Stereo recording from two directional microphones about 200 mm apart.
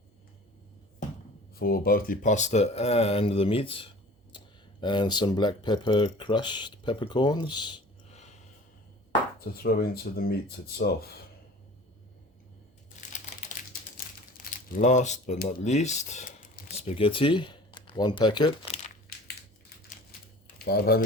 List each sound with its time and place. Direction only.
1.5 s speech: 50° left (ahead or behind); by 7.8 s 20° left (ahead or behind)
9.4 s speech: 50° left (ahead or behind)
13.0 s crumpling: 40° left (ahead or behind)
14.3 s speech: 40° left (ahead or behind)
20.7 s speech: 50° left (ahead or behind)